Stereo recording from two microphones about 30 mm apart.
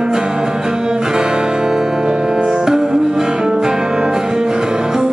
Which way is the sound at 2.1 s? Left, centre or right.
Right.